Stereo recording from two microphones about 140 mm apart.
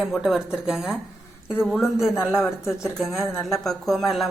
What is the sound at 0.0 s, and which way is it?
Speech, 5° right (ahead or behind).